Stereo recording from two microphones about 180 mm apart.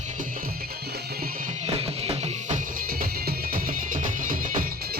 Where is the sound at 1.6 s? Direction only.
35° right (ahead or behind).